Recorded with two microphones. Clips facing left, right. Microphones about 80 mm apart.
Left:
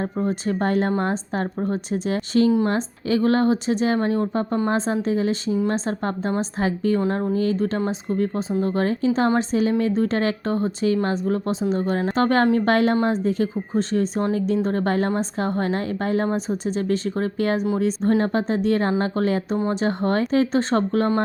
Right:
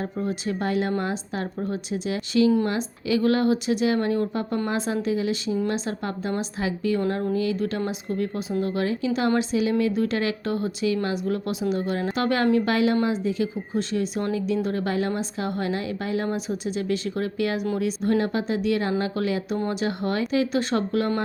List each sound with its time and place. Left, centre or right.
0.0 s a woman's voice: left
7.0 s a woman's voice: left